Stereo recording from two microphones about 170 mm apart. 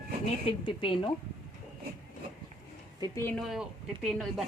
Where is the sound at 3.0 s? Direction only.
15° left (ahead or behind).